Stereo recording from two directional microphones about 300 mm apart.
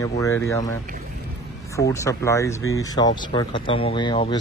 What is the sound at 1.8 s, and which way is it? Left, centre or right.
Speech, centre.